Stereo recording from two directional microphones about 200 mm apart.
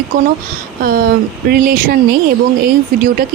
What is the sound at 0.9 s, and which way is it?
Speech, 50° right (ahead or behind).